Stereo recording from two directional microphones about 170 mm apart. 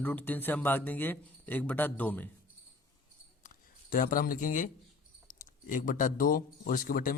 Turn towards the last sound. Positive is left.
turn(degrees=55)  # may be behind; listen again after turning